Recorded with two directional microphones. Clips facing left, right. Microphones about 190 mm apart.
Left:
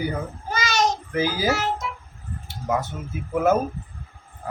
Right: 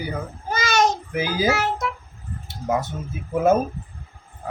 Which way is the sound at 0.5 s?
50° right (ahead or behind).